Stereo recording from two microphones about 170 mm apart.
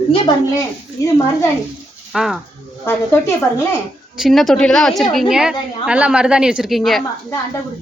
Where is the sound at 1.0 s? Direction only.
20° left (ahead or behind).